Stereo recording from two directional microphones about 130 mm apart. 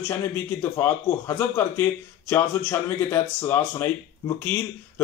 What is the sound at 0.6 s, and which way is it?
A man's voice, 15° left (ahead or behind).